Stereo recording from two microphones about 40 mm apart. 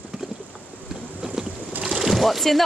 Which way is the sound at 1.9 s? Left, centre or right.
Centre.